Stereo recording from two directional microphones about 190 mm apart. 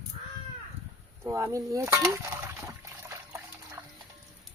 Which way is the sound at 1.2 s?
15° right (ahead or behind).